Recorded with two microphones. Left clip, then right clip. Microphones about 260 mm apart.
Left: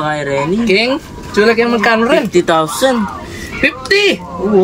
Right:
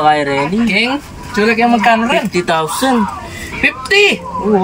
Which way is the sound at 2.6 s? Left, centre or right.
Left.